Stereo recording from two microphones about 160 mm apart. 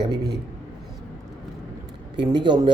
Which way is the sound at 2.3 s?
25° right (ahead or behind).